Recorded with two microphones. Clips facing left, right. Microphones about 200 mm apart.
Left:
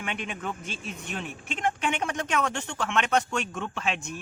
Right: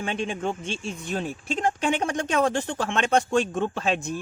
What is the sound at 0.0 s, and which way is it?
Speech, 30° right (ahead or behind).